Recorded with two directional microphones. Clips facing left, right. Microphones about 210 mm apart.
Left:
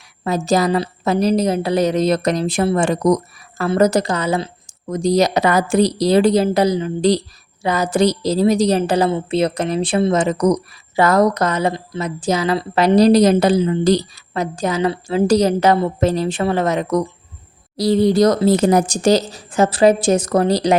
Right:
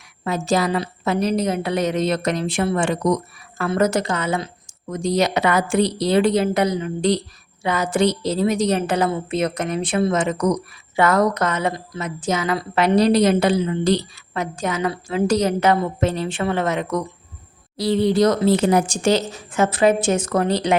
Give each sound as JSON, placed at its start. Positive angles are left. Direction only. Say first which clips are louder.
{"t": 0.3, "sound": "a woman's voice", "louder": "left 3 dB", "side_deg": 40}